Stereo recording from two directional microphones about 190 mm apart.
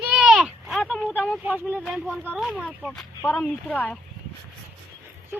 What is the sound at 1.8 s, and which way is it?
Speech, 5° right (ahead or behind).